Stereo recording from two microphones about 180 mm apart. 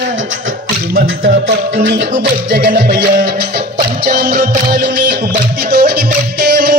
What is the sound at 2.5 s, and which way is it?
Music, 60° right (ahead or behind).